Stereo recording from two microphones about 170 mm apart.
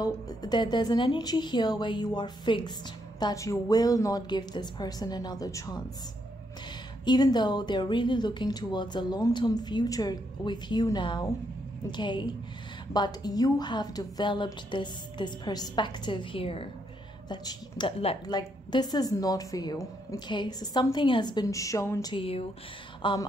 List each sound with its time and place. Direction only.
0.0 s a woman's voice: 25° left (ahead or behind)
7.1 s a woman's voice: 25° left (ahead or behind)
22.1 s a woman's voice: 35° left (ahead or behind)